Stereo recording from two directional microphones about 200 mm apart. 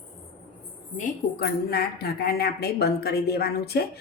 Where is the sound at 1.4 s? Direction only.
50° left (ahead or behind).